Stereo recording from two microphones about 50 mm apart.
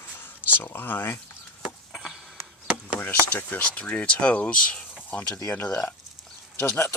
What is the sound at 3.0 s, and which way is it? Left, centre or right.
Speech, left.